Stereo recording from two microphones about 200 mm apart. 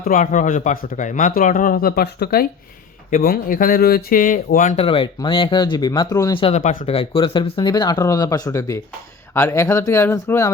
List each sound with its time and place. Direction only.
0.0 s speech: 40° left (ahead or behind)
4.9 s speech: 25° left (ahead or behind)